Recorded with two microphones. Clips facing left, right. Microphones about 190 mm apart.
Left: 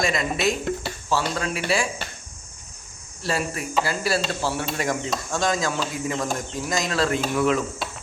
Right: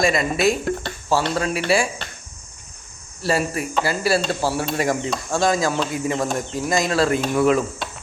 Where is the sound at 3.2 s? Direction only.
5° right (ahead or behind).